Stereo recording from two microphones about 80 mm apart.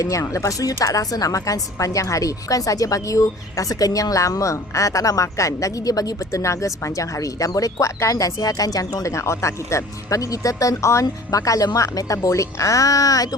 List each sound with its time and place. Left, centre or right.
0.0 s a woman's voice: left
9.1 s a woman's voice: left